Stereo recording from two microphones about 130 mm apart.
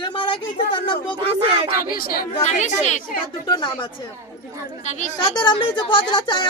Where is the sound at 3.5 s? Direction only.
40° left (ahead or behind).